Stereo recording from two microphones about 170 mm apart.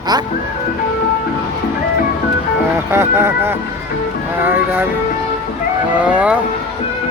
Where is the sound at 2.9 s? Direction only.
15° right (ahead or behind).